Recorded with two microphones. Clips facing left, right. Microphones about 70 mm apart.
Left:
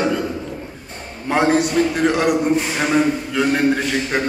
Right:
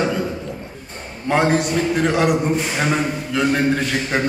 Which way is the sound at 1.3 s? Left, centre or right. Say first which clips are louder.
Left 1 dB; centre.